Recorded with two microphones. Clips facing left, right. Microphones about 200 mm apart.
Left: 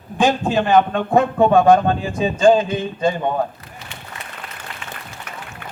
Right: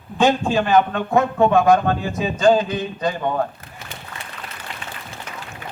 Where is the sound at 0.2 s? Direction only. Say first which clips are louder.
Even; 15° left (ahead or behind).